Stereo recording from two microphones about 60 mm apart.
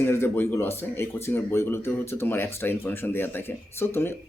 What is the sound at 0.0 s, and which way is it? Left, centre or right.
Speech, left.